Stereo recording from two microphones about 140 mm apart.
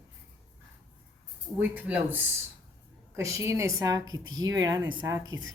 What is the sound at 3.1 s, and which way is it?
A woman's voice, 20° right (ahead or behind).